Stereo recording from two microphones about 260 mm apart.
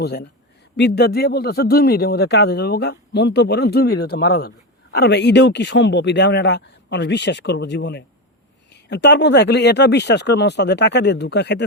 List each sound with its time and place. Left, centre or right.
0.0 s speech: left